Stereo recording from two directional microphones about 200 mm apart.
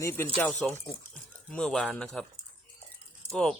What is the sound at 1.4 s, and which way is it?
Speech, centre (ahead or behind).